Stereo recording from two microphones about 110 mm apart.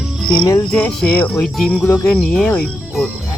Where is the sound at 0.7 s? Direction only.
5° left (ahead or behind).